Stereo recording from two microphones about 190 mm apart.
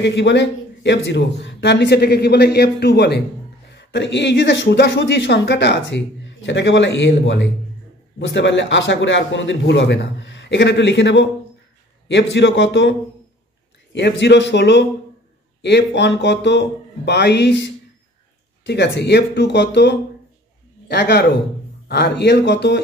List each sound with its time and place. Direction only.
0.0 s speech: 65° left (ahead or behind)
13.9 s speech: 65° left (ahead or behind)
18.7 s speech: 65° left (ahead or behind)